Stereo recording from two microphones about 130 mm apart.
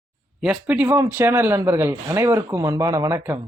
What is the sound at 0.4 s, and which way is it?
Speech, 15° right (ahead or behind).